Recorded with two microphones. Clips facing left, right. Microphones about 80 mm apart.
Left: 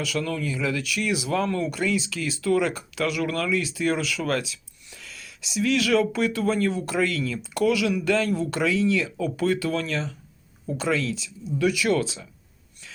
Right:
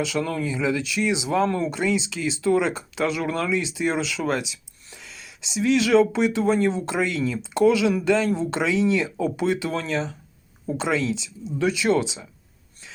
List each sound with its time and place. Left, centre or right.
0.0 s speech: right